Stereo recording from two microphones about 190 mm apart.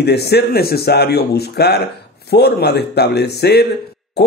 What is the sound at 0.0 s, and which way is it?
Speech, 60° left (ahead or behind).